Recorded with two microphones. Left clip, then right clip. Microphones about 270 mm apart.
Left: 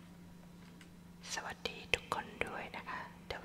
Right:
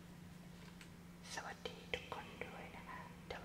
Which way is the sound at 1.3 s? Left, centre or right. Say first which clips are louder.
Left 6 dB; centre.